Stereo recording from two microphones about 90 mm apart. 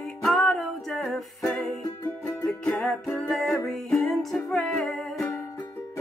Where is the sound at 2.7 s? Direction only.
10° left (ahead or behind).